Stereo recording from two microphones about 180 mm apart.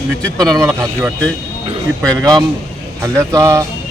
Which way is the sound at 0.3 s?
20° right (ahead or behind).